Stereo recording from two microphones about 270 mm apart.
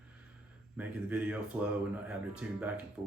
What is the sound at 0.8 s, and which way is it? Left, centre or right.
Speech, centre.